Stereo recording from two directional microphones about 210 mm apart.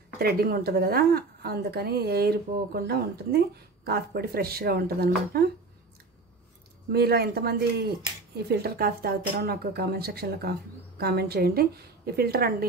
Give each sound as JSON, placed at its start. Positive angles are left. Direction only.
{"t": 0.2, "sound": "a woman's voice", "side_deg": -45}
{"t": 6.9, "sound": "a woman's voice", "side_deg": -50}